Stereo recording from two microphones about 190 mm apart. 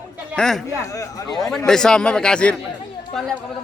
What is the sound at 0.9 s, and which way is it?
Speech, 15° left (ahead or behind).